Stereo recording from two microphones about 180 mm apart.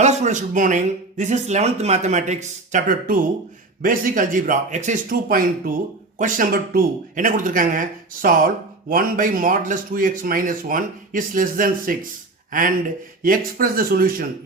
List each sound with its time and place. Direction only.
0.0 s speech: 40° right (ahead or behind)